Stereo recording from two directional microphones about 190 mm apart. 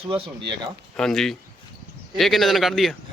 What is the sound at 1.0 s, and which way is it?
Speech, 5° left (ahead or behind).